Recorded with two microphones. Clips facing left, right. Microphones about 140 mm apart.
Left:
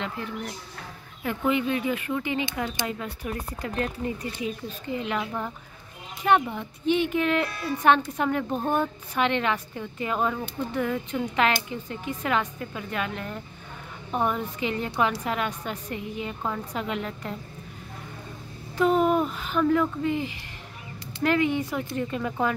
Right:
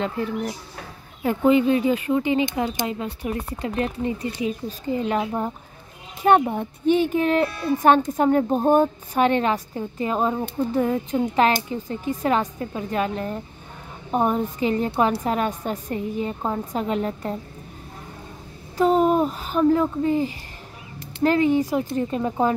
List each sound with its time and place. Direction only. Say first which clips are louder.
0.0 s speech: right 7 dB; 40° right (ahead or behind)
4.8 s speech: right 6 dB; 35° right (ahead or behind)
6.2 s speech: right 5 dB; 40° right (ahead or behind)
18.8 s speech: right 3 dB; 35° right (ahead or behind)